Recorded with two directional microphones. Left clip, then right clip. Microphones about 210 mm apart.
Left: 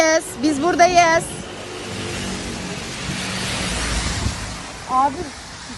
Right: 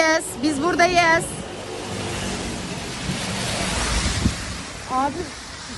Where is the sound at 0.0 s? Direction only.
10° right (ahead or behind).